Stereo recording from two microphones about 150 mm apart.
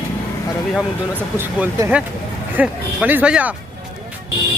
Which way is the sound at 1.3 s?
15° right (ahead or behind).